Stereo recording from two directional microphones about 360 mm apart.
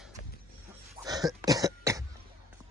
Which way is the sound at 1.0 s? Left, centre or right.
Centre.